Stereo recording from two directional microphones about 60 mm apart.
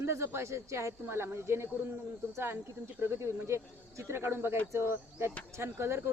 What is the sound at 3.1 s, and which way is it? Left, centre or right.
Speech, right.